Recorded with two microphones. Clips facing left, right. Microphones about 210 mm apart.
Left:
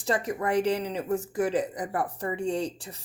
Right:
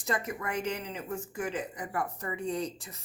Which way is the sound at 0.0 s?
35° left (ahead or behind).